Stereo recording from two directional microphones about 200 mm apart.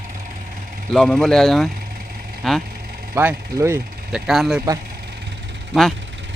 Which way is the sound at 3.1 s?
15° right (ahead or behind).